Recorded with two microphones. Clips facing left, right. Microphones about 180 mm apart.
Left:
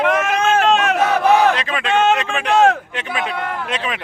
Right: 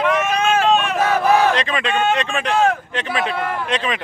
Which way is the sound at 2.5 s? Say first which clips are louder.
Left 4 dB; 75° left (ahead or behind).